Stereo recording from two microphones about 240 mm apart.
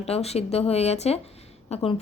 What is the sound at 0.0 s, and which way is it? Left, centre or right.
A woman's voice, left.